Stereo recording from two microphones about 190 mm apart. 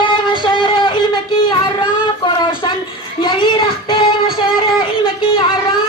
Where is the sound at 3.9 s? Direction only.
30° left (ahead or behind).